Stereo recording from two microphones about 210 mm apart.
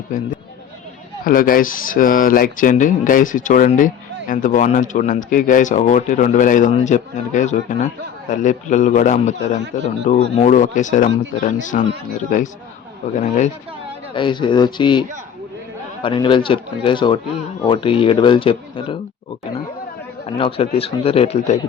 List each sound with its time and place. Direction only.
0.1 s speech: 40° left (ahead or behind)
13.1 s speech: 35° left (ahead or behind)
14.1 s speech: 20° left (ahead or behind)
16.0 s speech: 25° left (ahead or behind)
20.2 s speech: 25° left (ahead or behind)